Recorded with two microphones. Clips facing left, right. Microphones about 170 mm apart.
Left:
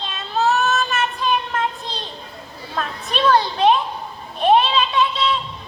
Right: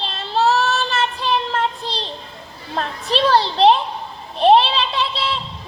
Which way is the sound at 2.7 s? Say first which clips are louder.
Right 3 dB; 30° right (ahead or behind).